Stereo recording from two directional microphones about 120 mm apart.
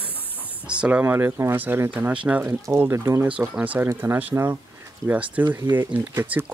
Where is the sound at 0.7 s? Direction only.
10° right (ahead or behind).